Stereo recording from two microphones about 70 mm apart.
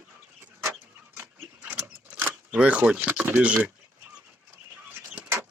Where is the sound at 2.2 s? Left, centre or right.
Right.